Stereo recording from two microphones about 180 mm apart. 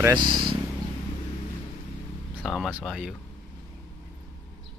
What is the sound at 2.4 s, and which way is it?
Speech, centre (ahead or behind).